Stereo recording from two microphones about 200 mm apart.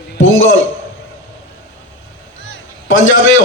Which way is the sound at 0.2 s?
75° left (ahead or behind).